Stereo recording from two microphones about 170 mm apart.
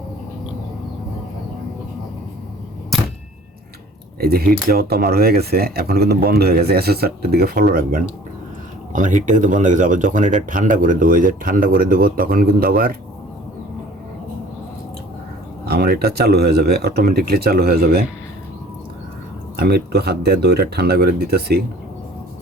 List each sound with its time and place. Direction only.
4.2 s speech: 65° right (ahead or behind)
15.6 s speech: 70° right (ahead or behind)
19.5 s speech: 70° right (ahead or behind)